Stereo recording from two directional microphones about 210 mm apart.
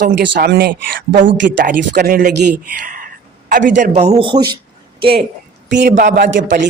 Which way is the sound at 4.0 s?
30° right (ahead or behind).